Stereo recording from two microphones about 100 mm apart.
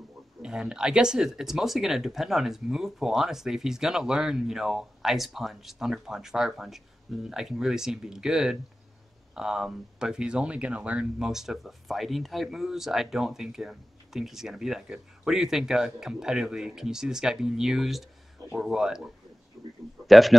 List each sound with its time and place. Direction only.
0.4 s speech: 10° right (ahead or behind)
19.6 s a sound: centre (ahead or behind)
20.1 s a man's voice: centre (ahead or behind)